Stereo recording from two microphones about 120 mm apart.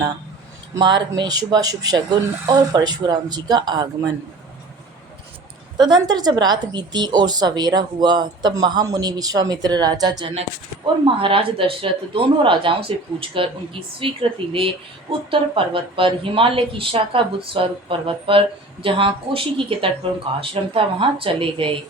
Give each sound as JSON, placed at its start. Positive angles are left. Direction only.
{"t": 0.8, "sound": "a woman's voice", "side_deg": -40}
{"t": 5.7, "sound": "a woman's voice", "side_deg": -35}
{"t": 11.0, "sound": "a woman's voice", "side_deg": -45}